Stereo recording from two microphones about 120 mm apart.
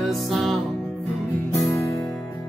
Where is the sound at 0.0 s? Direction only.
Centre (ahead or behind).